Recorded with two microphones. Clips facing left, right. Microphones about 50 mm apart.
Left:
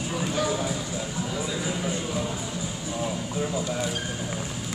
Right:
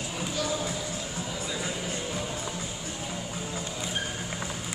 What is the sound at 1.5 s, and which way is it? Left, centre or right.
Music, centre.